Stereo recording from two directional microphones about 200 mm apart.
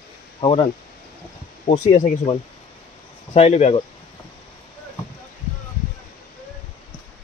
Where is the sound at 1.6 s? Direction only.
35° left (ahead or behind).